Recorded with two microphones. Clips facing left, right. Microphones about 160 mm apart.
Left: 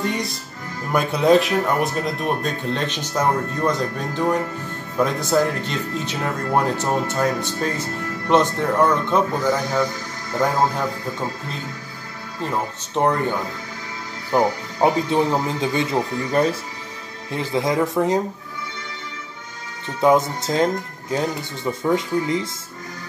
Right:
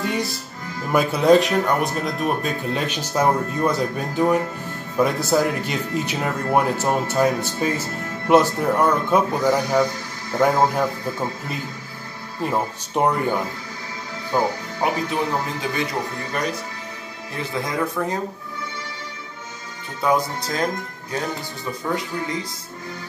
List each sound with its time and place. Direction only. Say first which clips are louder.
0.0 s speech: even; centre (ahead or behind)
12.4 s speech: right 2 dB; 10° right (ahead or behind)
14.3 s speech: left 3 dB; 30° left (ahead or behind)
17.6 s speech: left 6 dB; 20° left (ahead or behind)
20.0 s speech: left 4 dB; 25° left (ahead or behind)